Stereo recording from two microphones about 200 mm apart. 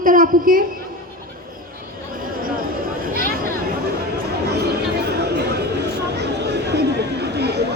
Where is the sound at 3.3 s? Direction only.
45° right (ahead or behind).